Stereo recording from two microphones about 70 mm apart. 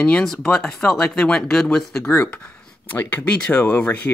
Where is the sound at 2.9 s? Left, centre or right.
Left.